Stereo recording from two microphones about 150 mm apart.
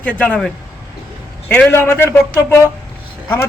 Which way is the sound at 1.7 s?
15° left (ahead or behind).